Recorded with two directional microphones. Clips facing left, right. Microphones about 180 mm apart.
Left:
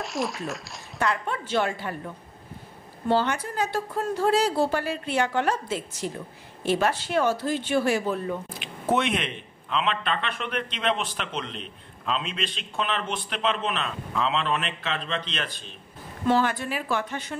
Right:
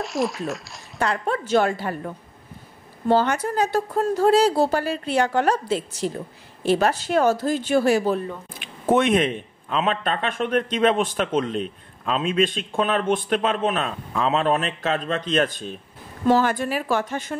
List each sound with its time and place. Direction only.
0.0 s speech: centre (ahead or behind)
0.9 s speech: 35° right (ahead or behind)
3.1 s speech: 45° right (ahead or behind)
8.5 s a man's voice: 50° right (ahead or behind)